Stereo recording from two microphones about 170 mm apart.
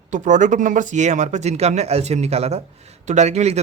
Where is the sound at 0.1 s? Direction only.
45° right (ahead or behind).